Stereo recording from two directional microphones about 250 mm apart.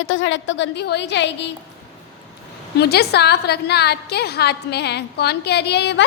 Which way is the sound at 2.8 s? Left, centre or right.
Left.